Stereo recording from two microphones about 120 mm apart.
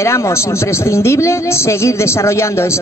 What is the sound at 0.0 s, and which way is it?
A woman's voice, 25° left (ahead or behind).